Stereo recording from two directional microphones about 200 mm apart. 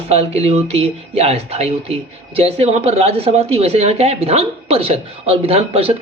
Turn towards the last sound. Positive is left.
turn(degrees=-30)  # may be behind; listen again after turning